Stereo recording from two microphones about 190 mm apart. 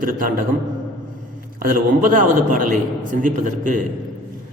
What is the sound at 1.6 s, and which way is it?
A man's voice, 45° right (ahead or behind).